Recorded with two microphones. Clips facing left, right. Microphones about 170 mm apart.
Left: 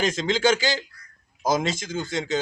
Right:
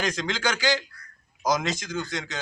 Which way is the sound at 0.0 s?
25° left (ahead or behind).